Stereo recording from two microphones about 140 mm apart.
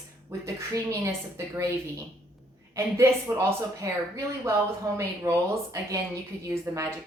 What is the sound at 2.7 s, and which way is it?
Speech, 20° right (ahead or behind).